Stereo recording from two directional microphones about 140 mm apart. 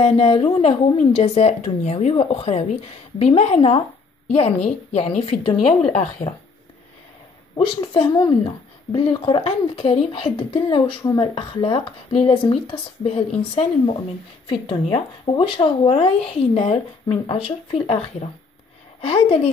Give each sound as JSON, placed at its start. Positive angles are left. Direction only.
{"t": 0.0, "sound": "speech", "side_deg": 45}
{"t": 7.5, "sound": "a woman's voice", "side_deg": 35}